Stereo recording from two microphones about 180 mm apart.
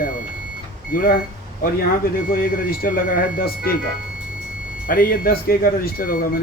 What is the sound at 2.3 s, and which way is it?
Speech, 55° left (ahead or behind).